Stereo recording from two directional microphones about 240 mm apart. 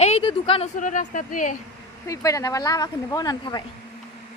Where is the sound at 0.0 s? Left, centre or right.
Left.